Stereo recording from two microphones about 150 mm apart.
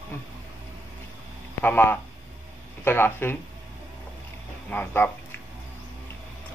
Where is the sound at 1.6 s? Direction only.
15° left (ahead or behind).